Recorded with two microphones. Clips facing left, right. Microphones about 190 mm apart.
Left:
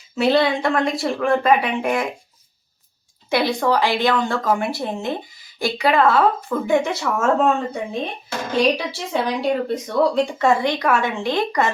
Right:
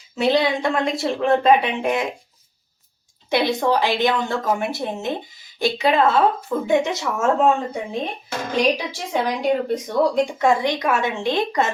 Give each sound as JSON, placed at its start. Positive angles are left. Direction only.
{"t": 0.2, "sound": "a woman's voice", "side_deg": -15}
{"t": 3.3, "sound": "a woman's voice", "side_deg": -20}